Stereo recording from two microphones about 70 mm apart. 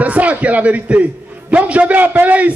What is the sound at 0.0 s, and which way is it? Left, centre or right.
A man's voice, right.